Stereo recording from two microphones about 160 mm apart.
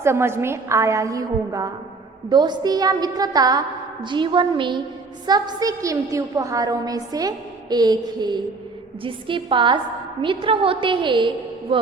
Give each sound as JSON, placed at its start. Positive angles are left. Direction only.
{"t": 0.0, "sound": "a woman's voice", "side_deg": -15}